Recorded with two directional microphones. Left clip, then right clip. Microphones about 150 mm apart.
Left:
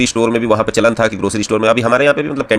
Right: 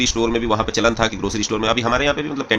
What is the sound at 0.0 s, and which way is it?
Speech, 45° left (ahead or behind).